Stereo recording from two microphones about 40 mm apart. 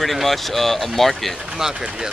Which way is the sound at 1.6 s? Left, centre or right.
Centre.